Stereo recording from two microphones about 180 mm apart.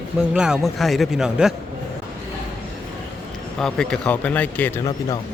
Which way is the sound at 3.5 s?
5° left (ahead or behind).